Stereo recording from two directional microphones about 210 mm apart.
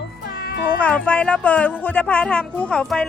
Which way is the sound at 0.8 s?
5° left (ahead or behind).